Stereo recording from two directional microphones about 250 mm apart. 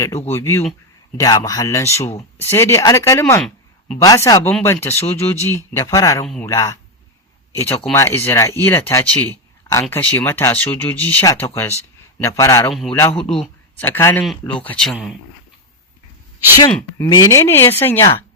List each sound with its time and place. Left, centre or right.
0.3 s speech: centre
2.0 s speech: left
2.5 s speech: centre
6.2 s speech: centre
6.5 s speech: centre
16.7 s speech: centre